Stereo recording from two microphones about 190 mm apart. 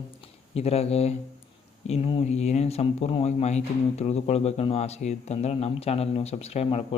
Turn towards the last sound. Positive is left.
turn(degrees=35)  # may be behind; listen again after turning